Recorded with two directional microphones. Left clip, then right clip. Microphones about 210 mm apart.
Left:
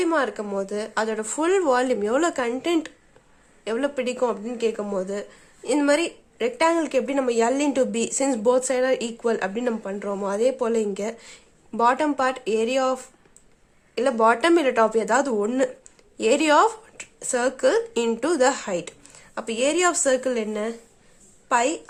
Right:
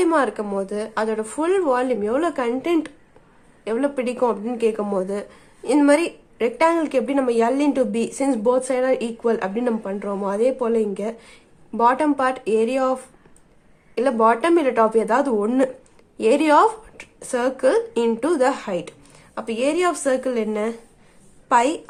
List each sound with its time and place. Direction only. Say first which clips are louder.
0.0 s a woman's voice: right 4 dB; 5° left (ahead or behind)